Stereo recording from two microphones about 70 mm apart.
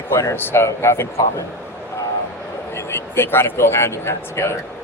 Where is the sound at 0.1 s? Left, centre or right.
Left.